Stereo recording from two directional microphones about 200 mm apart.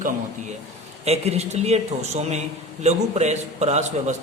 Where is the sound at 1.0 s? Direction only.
30° right (ahead or behind).